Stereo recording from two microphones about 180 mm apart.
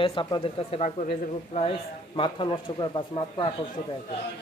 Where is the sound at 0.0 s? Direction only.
25° left (ahead or behind).